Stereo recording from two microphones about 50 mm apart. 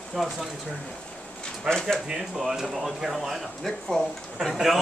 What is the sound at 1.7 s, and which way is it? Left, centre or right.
Speech, centre.